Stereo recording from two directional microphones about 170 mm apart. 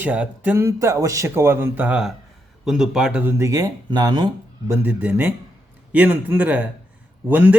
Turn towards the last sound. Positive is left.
turn(degrees=-10)  # may be behind; listen again after turning